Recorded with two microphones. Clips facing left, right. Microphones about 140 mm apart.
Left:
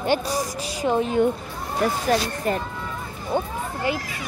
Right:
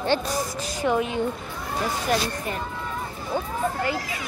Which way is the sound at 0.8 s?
25° left (ahead or behind).